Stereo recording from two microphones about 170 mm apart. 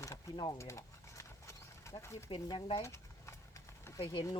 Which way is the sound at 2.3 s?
30° left (ahead or behind).